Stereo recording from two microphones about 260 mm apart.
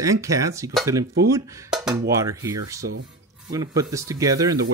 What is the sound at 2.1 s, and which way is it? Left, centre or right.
Speech, centre.